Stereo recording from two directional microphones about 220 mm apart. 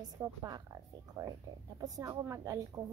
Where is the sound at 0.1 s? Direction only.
15° right (ahead or behind).